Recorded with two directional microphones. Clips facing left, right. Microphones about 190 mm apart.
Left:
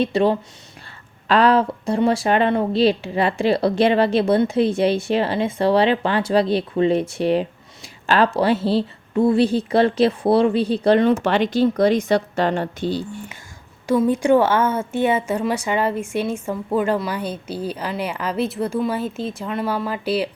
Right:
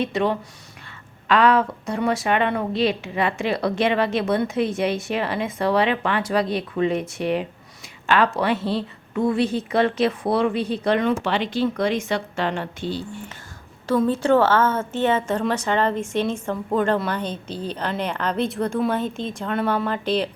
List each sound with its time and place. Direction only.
0.0 s a woman's voice: 30° left (ahead or behind)
13.8 s a woman's voice: 10° left (ahead or behind)